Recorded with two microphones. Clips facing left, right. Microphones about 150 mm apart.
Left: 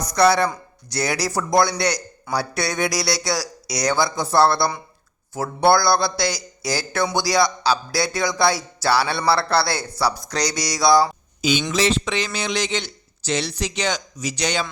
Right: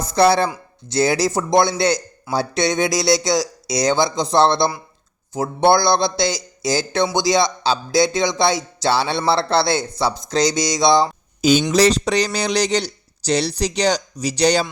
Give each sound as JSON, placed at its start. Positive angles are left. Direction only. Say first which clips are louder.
{"t": 0.0, "sound": "speech", "louder": "right 2 dB", "side_deg": -30}
{"t": 11.7, "sound": "speech", "louder": "right 5 dB", "side_deg": -40}